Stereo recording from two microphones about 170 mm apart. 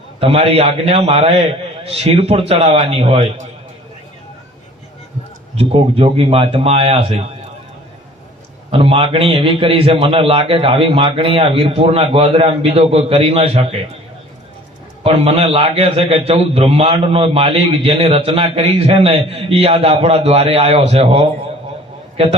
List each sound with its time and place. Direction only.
0.2 s a man's voice: 35° right (ahead or behind)
5.5 s a man's voice: 35° right (ahead or behind)
8.7 s a man's voice: 30° right (ahead or behind)
15.0 s a man's voice: 35° right (ahead or behind)